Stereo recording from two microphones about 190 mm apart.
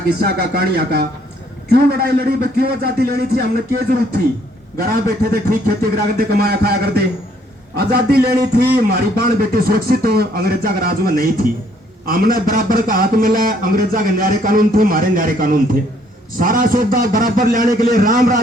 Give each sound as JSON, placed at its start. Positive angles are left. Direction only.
{"t": 0.2, "sound": "a man's voice", "side_deg": -55}